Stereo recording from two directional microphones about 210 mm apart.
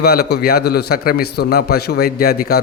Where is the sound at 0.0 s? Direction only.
50° left (ahead or behind).